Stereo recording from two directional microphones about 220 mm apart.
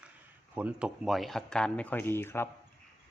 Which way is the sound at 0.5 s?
5° right (ahead or behind).